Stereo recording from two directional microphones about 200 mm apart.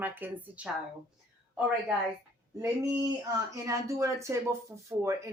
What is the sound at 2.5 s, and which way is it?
A man's voice, 15° right (ahead or behind).